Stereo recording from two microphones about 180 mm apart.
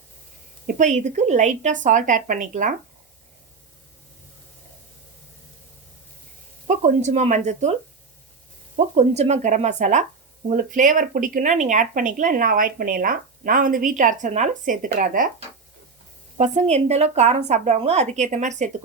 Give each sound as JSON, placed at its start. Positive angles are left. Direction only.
{"t": 0.7, "sound": "speech", "side_deg": -45}
{"t": 6.7, "sound": "speech", "side_deg": -40}
{"t": 8.7, "sound": "speech", "side_deg": -35}
{"t": 16.4, "sound": "speech", "side_deg": -40}